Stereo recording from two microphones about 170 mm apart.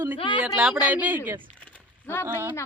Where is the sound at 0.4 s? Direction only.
5° right (ahead or behind).